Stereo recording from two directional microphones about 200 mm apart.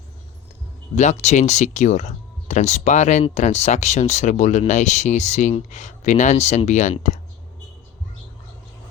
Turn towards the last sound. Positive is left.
turn(degrees=35)  # may be behind; listen again after turning